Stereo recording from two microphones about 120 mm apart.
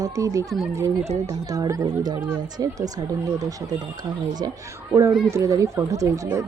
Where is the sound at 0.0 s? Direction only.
30° right (ahead or behind).